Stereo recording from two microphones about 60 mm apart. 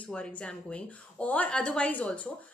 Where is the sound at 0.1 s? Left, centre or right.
Centre.